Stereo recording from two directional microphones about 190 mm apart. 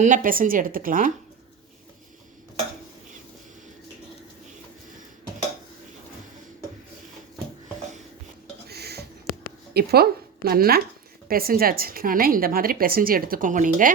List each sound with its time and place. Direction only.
0.0 s a woman's voice: 45° right (ahead or behind)
8.6 s a sound: 55° right (ahead or behind)
9.7 s a woman's voice: 55° right (ahead or behind)